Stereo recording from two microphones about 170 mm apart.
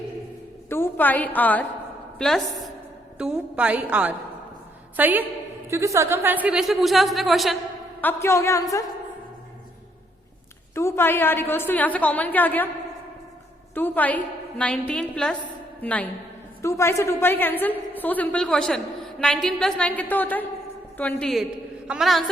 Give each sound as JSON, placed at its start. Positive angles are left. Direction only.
{"t": 0.7, "sound": "a woman's voice", "side_deg": 10}
{"t": 8.0, "sound": "a woman's voice", "side_deg": 15}
{"t": 10.8, "sound": "a woman's voice", "side_deg": 15}
{"t": 13.7, "sound": "a woman's voice", "side_deg": 10}